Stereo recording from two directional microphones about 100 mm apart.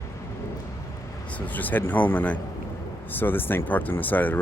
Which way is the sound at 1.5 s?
20° left (ahead or behind).